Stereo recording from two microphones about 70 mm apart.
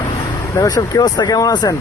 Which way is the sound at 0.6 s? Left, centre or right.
Left.